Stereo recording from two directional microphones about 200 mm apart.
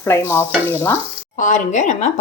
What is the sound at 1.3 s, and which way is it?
Speech, 40° left (ahead or behind).